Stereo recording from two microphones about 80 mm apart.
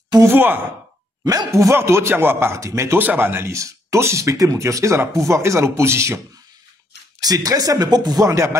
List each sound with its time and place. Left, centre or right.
0.2 s speech: right
1.2 s speech: right
1.5 s speech: right
3.0 s speech: right
7.2 s speech: right